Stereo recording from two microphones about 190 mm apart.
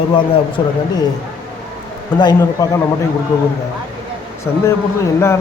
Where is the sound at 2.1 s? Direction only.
20° left (ahead or behind).